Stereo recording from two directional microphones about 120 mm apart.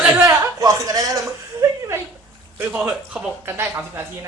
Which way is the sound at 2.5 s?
15° right (ahead or behind).